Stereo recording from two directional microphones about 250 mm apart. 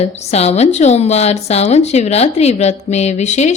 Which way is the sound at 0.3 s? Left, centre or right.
Left.